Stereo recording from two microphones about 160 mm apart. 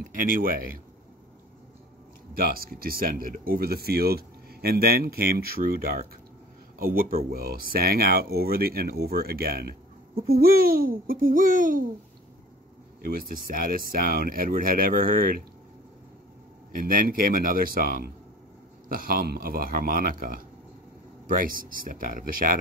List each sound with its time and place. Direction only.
0.1 s speech: 60° right (ahead or behind)
2.3 s speech: 65° right (ahead or behind)
13.0 s speech: 65° right (ahead or behind)
16.7 s speech: 60° right (ahead or behind)